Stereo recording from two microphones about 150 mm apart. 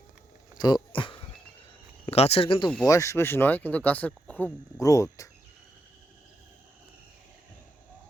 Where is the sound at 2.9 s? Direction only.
20° left (ahead or behind).